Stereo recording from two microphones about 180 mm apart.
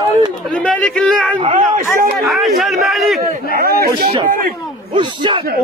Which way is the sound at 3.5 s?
55° right (ahead or behind).